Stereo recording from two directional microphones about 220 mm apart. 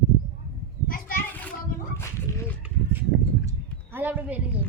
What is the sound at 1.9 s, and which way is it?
Speech, 10° left (ahead or behind).